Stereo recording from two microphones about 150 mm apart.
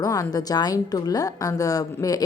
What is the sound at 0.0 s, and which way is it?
A woman's voice, 25° left (ahead or behind).